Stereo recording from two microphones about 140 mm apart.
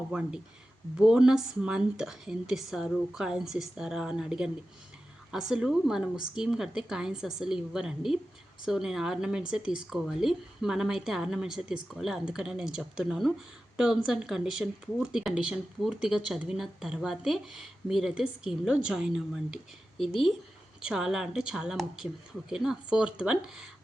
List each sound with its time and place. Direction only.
0.1 s speech: 5° right (ahead or behind)